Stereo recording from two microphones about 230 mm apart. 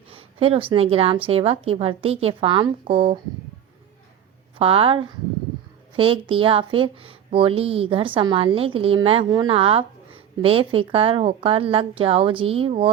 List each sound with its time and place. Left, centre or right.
0.1 s speech: right
4.5 s speech: right